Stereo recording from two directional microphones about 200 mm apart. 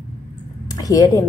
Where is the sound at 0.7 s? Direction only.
20° left (ahead or behind).